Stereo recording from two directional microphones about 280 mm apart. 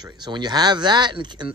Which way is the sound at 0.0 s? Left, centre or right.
Centre.